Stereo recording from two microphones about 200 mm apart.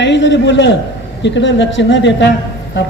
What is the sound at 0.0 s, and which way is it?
A man's voice, 65° left (ahead or behind).